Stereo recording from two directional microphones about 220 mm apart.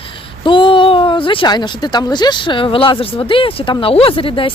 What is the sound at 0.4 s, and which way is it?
Speech, 25° left (ahead or behind).